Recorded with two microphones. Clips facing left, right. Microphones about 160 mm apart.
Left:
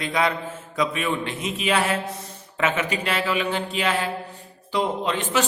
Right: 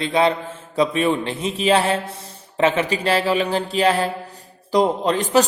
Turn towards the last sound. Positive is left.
turn(degrees=-40)  # may be behind; listen again after turning